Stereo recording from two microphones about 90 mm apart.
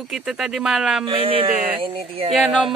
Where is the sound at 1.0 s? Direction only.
90° right.